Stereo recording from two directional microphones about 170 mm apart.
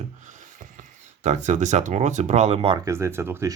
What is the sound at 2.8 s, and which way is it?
Speech, 15° right (ahead or behind).